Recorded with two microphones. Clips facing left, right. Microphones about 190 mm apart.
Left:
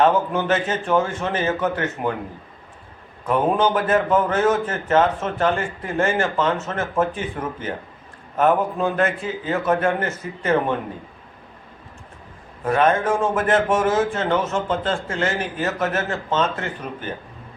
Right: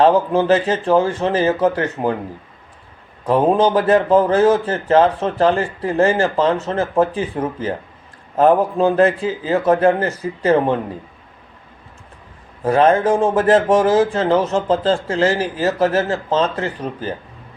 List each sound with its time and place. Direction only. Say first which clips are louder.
0.0 s speech: right 5 dB; 30° right (ahead or behind)
3.2 s speech: right 5 dB; 30° right (ahead or behind)
12.6 s speech: right 5 dB; 30° right (ahead or behind)